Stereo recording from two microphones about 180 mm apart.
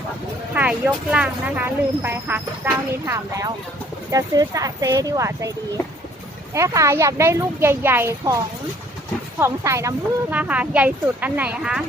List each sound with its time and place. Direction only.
0.5 s speech: 10° right (ahead or behind)
9.4 s speech: 15° right (ahead or behind)